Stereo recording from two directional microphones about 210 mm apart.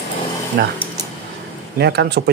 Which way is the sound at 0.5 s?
50° right (ahead or behind).